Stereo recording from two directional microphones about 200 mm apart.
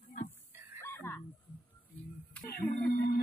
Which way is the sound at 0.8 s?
10° left (ahead or behind).